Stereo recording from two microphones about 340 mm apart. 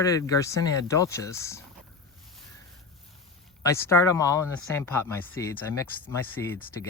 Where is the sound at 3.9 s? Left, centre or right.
Centre.